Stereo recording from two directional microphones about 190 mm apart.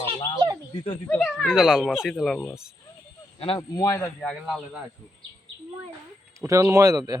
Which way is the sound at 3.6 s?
15° left (ahead or behind).